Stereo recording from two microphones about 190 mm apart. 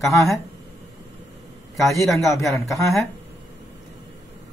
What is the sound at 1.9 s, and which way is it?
A man's voice, centre (ahead or behind).